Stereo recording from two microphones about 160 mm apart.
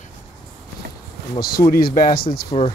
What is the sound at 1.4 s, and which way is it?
Speech, 70° left (ahead or behind).